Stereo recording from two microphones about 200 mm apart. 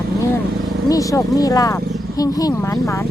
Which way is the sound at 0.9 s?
15° left (ahead or behind).